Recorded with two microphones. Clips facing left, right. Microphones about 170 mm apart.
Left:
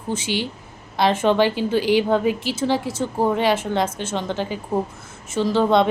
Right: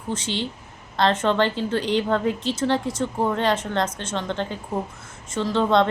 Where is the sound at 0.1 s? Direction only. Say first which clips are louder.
Left 3 dB; 10° left (ahead or behind).